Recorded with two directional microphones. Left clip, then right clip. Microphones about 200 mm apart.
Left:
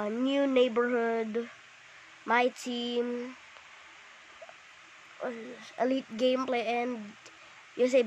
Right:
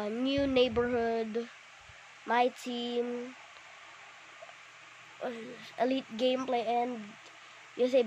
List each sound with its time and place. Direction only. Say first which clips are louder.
0.0 s speech: left 2 dB; 10° left (ahead or behind)
5.2 s speech: left 1 dB; 10° left (ahead or behind)
5.9 s speech: left 2 dB; 20° left (ahead or behind)